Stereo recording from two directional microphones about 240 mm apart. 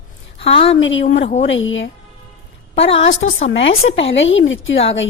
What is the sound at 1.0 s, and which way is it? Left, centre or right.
Speech, left.